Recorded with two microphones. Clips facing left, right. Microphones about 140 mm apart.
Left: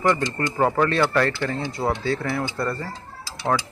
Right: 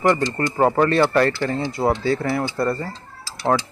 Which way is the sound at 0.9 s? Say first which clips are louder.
Right 4 dB; 10° right (ahead or behind).